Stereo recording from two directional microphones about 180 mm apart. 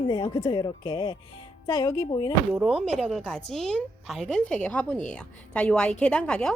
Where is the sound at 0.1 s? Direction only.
20° left (ahead or behind).